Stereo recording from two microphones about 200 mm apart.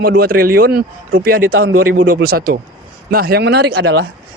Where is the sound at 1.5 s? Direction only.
90° right.